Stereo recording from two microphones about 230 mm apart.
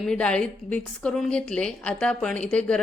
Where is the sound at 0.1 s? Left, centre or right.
Centre.